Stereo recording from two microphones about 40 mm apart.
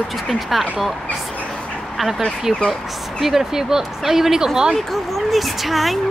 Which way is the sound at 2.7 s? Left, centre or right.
Centre.